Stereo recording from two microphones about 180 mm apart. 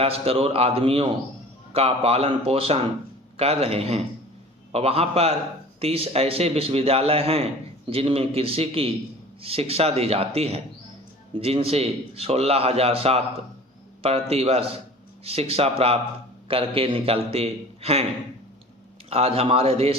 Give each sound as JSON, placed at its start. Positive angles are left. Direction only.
{"t": 0.0, "sound": "a man's voice", "side_deg": -35}
{"t": 19.1, "sound": "a man's voice", "side_deg": -30}